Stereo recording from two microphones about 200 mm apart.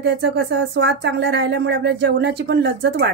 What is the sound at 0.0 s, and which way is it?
A woman's voice, 60° right (ahead or behind).